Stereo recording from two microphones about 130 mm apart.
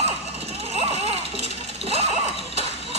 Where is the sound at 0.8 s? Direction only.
50° right (ahead or behind).